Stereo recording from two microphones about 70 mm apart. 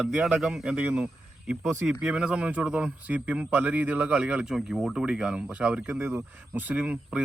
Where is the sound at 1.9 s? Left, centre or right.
Centre.